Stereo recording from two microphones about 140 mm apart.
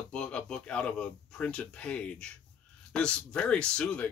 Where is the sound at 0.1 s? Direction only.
5° left (ahead or behind).